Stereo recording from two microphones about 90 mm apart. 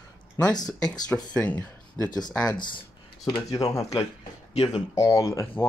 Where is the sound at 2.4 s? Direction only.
55° left (ahead or behind).